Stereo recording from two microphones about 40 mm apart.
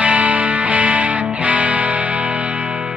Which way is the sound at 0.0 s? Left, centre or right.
Right.